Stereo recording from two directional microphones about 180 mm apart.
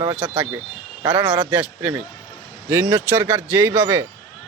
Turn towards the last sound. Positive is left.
turn(degrees=-15)  # may be behind; listen again after turning